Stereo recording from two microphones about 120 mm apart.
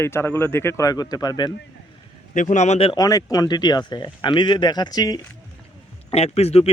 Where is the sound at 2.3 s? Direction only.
90° left.